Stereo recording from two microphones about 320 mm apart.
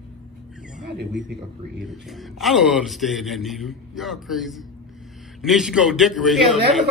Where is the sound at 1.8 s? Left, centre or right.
Centre.